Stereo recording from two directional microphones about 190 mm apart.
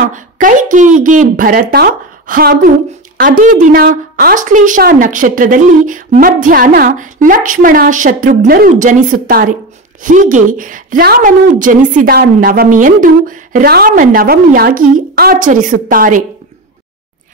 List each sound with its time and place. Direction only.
0.0 s a woman's voice: 45° right (ahead or behind)